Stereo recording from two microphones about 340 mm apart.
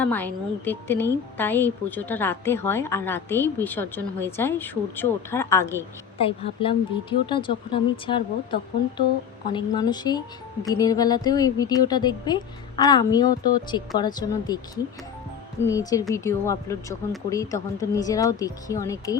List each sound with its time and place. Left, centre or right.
0.0 s a woman's voice: centre
15.6 s speech: centre